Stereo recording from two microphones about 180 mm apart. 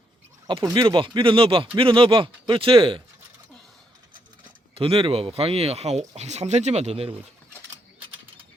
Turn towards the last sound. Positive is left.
turn(degrees=-35)  # may be behind; listen again after turning